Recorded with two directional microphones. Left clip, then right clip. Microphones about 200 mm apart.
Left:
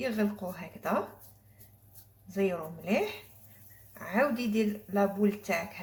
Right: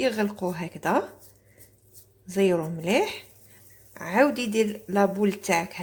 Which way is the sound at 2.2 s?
50° right (ahead or behind).